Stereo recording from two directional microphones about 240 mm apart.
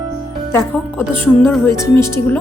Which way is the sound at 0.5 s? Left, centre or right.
Centre.